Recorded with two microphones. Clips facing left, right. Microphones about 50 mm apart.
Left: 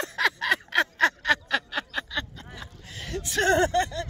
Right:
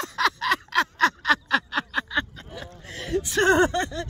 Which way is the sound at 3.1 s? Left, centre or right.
Centre.